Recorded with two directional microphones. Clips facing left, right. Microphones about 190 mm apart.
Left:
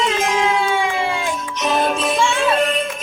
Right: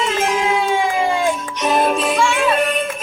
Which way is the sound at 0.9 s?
45° right (ahead or behind).